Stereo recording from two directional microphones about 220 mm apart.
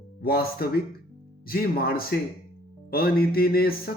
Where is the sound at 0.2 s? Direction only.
45° left (ahead or behind).